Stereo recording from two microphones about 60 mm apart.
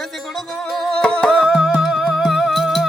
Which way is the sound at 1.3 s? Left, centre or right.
Centre.